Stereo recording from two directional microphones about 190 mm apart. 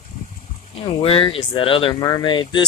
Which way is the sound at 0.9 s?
30° left (ahead or behind).